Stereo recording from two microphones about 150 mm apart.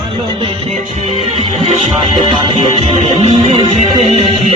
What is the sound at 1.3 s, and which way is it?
Music, 45° right (ahead or behind).